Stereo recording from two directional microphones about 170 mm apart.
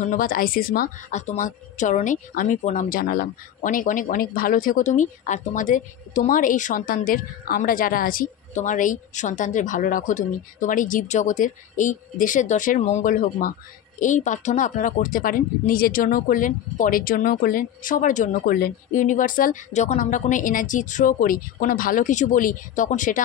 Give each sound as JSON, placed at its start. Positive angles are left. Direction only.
{"t": 0.0, "sound": "a woman's voice", "side_deg": 55}